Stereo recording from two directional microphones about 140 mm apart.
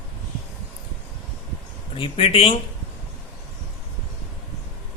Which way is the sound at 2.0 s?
40° left (ahead or behind).